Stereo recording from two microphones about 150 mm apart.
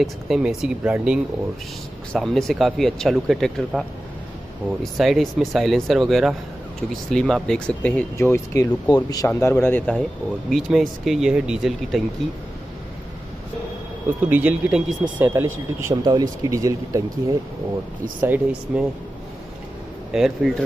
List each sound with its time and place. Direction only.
0.0 s speech: 5° right (ahead or behind)
10.5 s speech: centre (ahead or behind)
14.2 s speech: 10° right (ahead or behind)
15.9 s speech: 25° right (ahead or behind)
18.2 s speech: 10° right (ahead or behind)
20.1 s speech: 5° right (ahead or behind)